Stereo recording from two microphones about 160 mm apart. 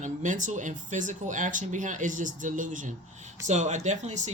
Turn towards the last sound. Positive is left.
turn(degrees=-50)  # may be behind; listen again after turning